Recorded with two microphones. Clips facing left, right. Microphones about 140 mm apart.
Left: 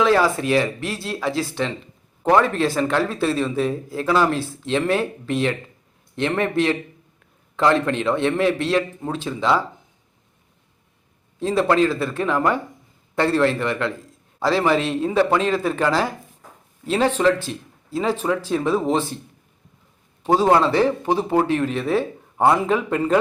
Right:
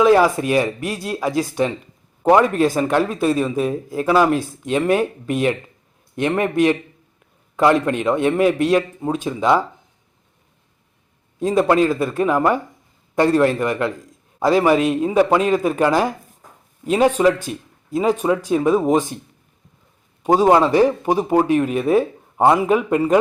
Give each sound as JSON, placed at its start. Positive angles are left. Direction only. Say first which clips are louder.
{"t": 0.0, "sound": "speech", "louder": "right 4 dB", "side_deg": -15}
{"t": 11.3, "sound": "speech", "louder": "right 2 dB", "side_deg": -15}
{"t": 20.2, "sound": "speech", "louder": "right 3 dB", "side_deg": -15}